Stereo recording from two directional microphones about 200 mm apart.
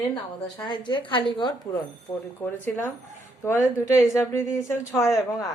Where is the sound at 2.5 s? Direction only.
10° left (ahead or behind).